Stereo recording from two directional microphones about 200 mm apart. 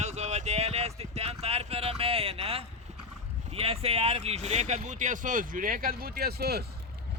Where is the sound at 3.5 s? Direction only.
30° right (ahead or behind); by 6.7 s 50° right (ahead or behind).